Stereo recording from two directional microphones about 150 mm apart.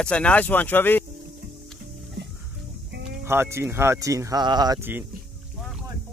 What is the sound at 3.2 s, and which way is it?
Speech, 15° right (ahead or behind).